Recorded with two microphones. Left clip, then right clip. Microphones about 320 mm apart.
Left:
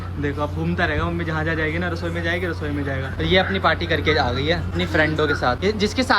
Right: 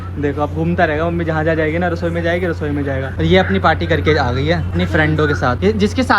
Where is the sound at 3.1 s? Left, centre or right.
Centre.